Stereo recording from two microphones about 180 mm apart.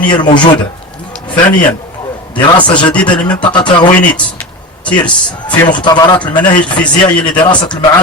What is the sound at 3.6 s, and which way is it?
Speech, 25° left (ahead or behind).